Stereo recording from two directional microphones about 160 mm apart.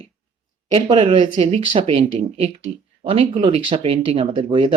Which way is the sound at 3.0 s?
35° right (ahead or behind).